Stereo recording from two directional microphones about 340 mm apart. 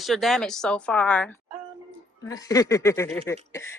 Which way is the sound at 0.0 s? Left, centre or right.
Centre.